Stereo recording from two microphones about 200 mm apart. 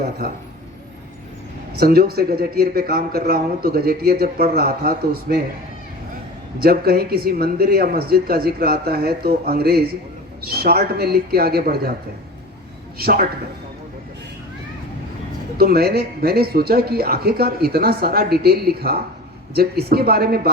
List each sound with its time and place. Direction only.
1.8 s speech: 50° right (ahead or behind)
6.6 s speech: 50° right (ahead or behind)
13.0 s speech: 50° right (ahead or behind)
15.5 s speech: 50° right (ahead or behind)